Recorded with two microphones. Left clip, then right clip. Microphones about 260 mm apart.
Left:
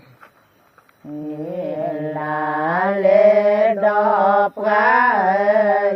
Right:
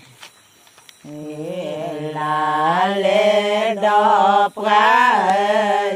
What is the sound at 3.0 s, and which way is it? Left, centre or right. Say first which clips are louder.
Mantra: left 6 dB; right.